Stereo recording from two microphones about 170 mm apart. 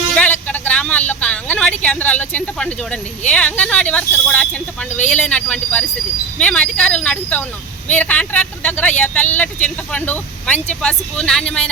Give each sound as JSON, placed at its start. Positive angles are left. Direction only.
{"t": 0.1, "sound": "speech", "side_deg": 10}